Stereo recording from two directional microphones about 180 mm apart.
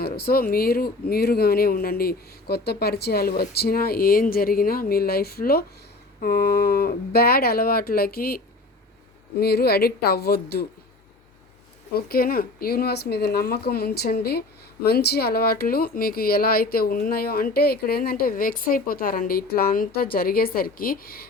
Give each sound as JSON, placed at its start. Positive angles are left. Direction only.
{"t": 0.0, "sound": "speech", "side_deg": 60}
{"t": 9.4, "sound": "speech", "side_deg": 60}
{"t": 11.9, "sound": "speech", "side_deg": 55}